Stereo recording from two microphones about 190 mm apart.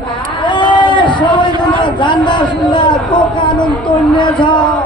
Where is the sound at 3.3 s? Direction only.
25° left (ahead or behind).